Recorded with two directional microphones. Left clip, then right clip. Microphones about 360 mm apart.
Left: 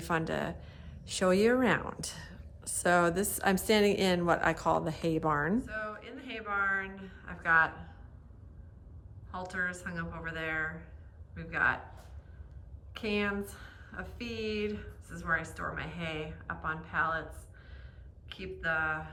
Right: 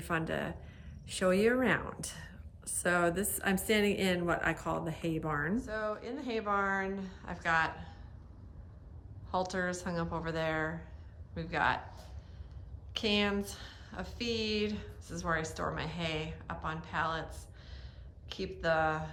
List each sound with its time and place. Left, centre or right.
0.0 s speech: centre
5.5 s a woman's voice: centre
9.3 s a woman's voice: centre
12.9 s a woman's voice: centre